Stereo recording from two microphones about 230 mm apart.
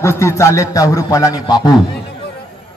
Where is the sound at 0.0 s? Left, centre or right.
Centre.